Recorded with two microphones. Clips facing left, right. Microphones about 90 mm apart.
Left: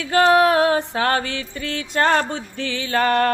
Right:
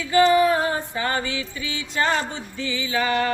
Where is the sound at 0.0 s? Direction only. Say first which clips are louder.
Left 2 dB; 65° left (ahead or behind).